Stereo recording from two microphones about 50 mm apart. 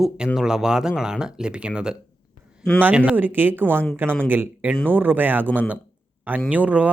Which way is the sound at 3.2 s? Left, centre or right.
Right.